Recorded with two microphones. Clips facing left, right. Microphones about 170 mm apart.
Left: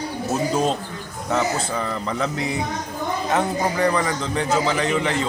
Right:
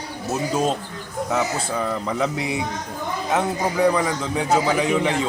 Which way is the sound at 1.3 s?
5° right (ahead or behind).